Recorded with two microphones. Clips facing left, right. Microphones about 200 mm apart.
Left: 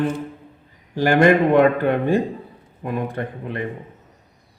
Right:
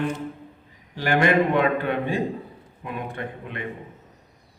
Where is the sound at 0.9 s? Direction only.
45° left (ahead or behind).